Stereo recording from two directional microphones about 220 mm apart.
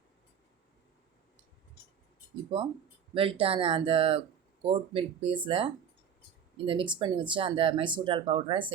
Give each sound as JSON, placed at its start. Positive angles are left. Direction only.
{"t": 2.5, "sound": "speech", "side_deg": -25}